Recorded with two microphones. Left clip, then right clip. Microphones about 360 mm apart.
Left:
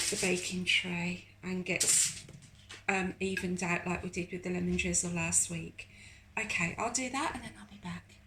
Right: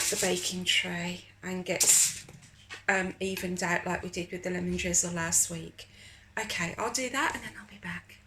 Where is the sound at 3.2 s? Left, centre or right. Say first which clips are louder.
Right 2 dB; centre.